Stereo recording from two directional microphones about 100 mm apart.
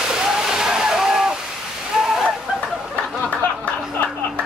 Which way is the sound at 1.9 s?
5° right (ahead or behind).